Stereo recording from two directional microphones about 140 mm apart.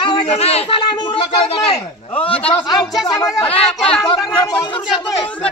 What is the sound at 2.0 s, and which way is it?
Speech, 40° left (ahead or behind).